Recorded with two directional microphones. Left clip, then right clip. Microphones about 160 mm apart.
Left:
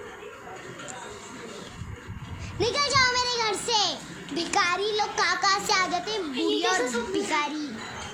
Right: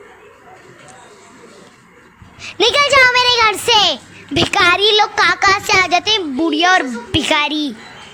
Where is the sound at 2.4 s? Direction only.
45° right (ahead or behind).